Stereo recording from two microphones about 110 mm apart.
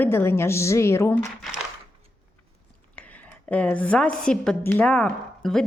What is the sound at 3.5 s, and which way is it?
A woman's voice, 10° left (ahead or behind).